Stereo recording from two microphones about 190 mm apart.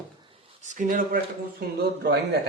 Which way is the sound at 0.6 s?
45° right (ahead or behind).